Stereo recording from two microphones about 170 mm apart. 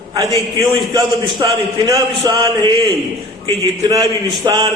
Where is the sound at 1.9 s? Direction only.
20° right (ahead or behind).